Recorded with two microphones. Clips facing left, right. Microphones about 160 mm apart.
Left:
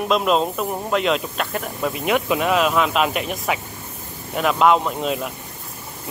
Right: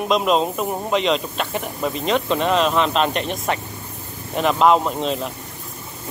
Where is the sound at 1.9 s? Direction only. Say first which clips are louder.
Even; 10° left (ahead or behind).